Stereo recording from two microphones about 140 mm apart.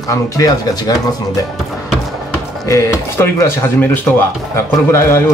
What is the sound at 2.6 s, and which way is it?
Music, 20° left (ahead or behind).